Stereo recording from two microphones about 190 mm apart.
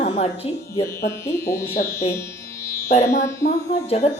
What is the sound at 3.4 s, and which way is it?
Speech, 35° left (ahead or behind).